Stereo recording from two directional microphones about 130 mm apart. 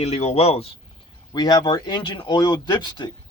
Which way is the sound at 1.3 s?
30° left (ahead or behind).